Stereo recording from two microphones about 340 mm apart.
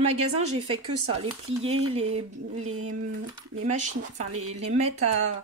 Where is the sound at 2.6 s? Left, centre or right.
Right.